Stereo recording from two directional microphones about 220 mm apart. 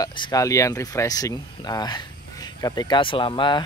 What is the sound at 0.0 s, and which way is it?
Speech, 20° left (ahead or behind).